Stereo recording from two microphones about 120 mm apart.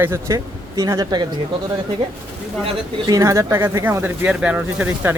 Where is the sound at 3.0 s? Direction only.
30° right (ahead or behind).